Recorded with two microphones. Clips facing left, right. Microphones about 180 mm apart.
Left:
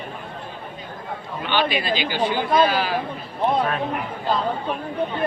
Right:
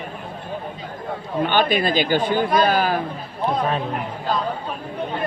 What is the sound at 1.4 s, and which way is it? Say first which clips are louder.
Speech: right 4 dB; 45° right (ahead or behind).